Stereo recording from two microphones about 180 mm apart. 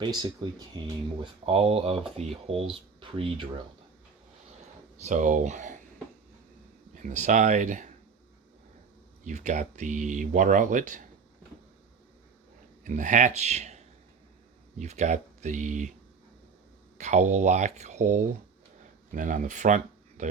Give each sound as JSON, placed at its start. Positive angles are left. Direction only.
{"t": 0.0, "sound": "speech", "side_deg": -25}
{"t": 4.9, "sound": "speech", "side_deg": -45}
{"t": 6.9, "sound": "speech", "side_deg": -45}
{"t": 9.2, "sound": "speech", "side_deg": -40}
{"t": 12.8, "sound": "speech", "side_deg": -45}
{"t": 17.0, "sound": "speech", "side_deg": -40}